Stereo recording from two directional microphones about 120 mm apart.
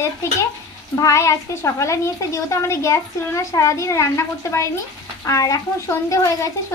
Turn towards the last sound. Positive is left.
turn(degrees=25)  # may be behind; listen again after turning